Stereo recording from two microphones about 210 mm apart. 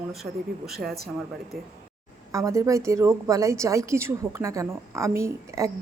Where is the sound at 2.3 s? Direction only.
15° right (ahead or behind).